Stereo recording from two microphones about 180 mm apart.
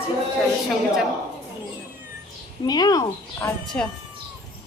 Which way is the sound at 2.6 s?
20° left (ahead or behind).